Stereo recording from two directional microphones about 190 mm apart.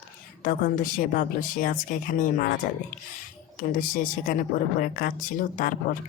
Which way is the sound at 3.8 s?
45° left (ahead or behind).